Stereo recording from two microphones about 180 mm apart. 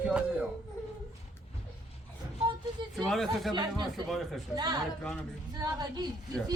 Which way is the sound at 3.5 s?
25° right (ahead or behind).